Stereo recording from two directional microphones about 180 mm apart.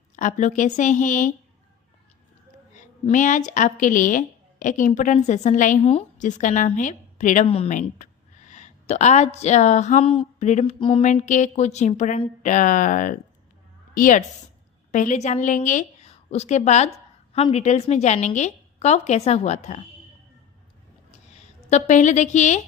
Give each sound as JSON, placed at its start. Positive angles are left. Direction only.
{"t": 0.2, "sound": "a woman's voice", "side_deg": 45}
{"t": 3.1, "sound": "a woman's voice", "side_deg": 45}
{"t": 7.4, "sound": "a woman's voice", "side_deg": 35}
{"t": 11.0, "sound": "a woman's voice", "side_deg": 45}
{"t": 21.7, "sound": "a woman's voice", "side_deg": 45}